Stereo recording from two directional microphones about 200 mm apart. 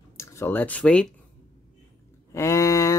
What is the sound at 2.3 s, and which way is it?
Speech, 15° left (ahead or behind).